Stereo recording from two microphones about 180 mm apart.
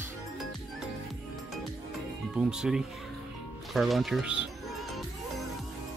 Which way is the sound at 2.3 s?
5° right (ahead or behind).